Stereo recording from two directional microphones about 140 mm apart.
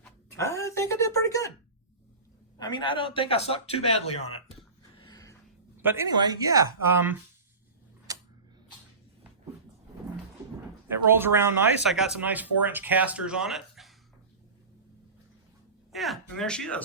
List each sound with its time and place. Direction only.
0.3 s speech: 20° left (ahead or behind)
2.6 s a man's voice: 30° left (ahead or behind)
4.9 s a sound: 30° left (ahead or behind)
5.7 s a sound: 15° right (ahead or behind)
6.1 s speech: 30° right (ahead or behind)
10.8 s speech: 15° right (ahead or behind)
11.9 s speech: 5° right (ahead or behind)
15.9 s speech: centre (ahead or behind)